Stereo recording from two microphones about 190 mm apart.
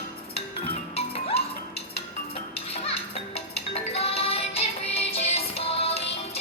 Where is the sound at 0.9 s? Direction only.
30° left (ahead or behind).